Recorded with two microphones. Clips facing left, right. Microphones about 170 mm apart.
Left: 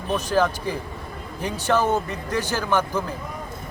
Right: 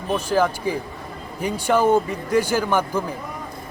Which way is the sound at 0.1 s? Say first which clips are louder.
Right 1 dB; 10° right (ahead or behind).